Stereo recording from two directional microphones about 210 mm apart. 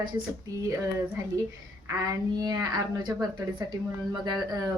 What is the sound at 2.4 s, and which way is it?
Speech, 20° right (ahead or behind).